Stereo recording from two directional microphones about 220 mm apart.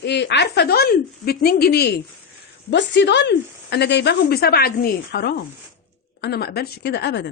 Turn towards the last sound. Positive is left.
turn(degrees=50)  # may be behind; listen again after turning